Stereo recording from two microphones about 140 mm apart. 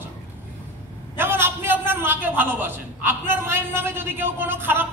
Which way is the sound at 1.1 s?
15° right (ahead or behind).